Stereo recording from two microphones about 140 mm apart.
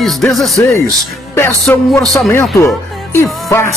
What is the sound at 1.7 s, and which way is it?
Speech, 15° left (ahead or behind).